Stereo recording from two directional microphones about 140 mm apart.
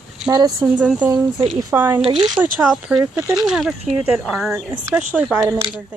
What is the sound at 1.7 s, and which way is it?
Speech, 15° right (ahead or behind).